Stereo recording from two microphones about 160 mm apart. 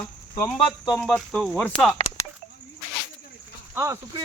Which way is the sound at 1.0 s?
5° left (ahead or behind).